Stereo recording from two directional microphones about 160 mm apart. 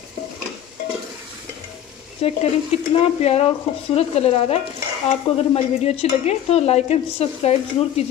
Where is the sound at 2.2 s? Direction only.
40° left (ahead or behind).